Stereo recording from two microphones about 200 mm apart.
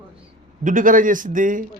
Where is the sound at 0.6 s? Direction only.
40° right (ahead or behind).